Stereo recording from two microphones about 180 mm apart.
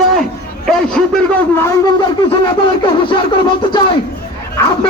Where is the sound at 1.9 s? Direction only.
25° left (ahead or behind).